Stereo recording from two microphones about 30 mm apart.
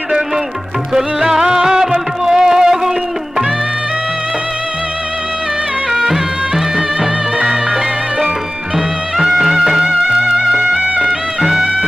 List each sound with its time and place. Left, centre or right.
0.9 s music: centre
5.9 s music: centre
7.4 s music: right
9.1 s music: centre
9.8 s music: right
11.3 s music: centre